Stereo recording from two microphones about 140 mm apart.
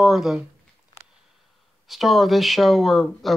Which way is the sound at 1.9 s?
Centre (ahead or behind).